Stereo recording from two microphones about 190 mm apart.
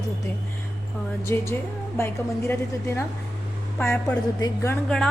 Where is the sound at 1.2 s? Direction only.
15° left (ahead or behind).